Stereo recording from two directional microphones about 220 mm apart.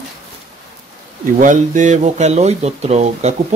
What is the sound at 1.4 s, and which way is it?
Speech, 35° right (ahead or behind).